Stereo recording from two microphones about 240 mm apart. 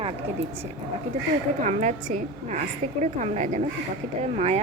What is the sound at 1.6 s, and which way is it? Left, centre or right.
A woman's voice, right.